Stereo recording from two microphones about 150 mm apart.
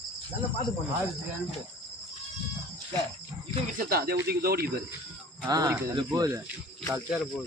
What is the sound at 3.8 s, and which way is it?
Speech, 90° right.